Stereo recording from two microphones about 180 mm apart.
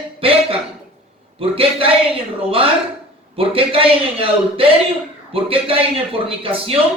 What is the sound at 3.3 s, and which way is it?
A man's voice, 30° right (ahead or behind).